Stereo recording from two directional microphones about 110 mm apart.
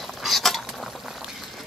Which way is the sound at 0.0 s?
Centre (ahead or behind).